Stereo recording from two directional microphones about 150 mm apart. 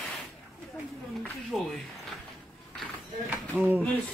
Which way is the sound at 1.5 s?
Centre (ahead or behind).